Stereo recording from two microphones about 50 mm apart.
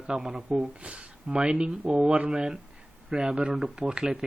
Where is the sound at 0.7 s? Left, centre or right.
Right.